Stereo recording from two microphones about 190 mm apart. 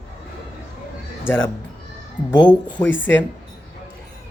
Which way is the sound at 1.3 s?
10° left (ahead or behind).